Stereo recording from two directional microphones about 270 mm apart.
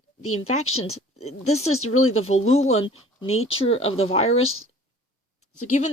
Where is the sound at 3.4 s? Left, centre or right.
Left.